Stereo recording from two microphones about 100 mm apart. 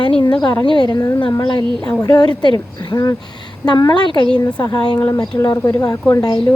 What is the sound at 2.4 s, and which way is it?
Speech, 45° left (ahead or behind).